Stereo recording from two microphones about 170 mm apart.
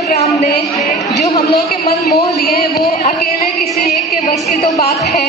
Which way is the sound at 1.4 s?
65° left (ahead or behind).